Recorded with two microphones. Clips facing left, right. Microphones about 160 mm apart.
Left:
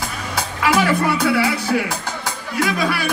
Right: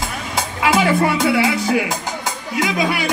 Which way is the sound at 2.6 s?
20° right (ahead or behind).